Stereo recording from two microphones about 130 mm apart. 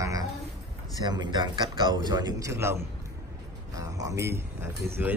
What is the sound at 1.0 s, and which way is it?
A man's voice, 35° right (ahead or behind).